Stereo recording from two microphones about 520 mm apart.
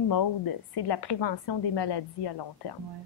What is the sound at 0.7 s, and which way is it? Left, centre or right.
A woman's voice, left.